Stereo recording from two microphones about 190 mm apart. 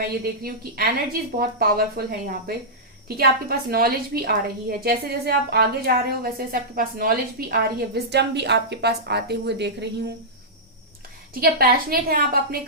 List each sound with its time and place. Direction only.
0.0 s a woman's voice: 50° right (ahead or behind)
11.3 s a woman's voice: 50° right (ahead or behind)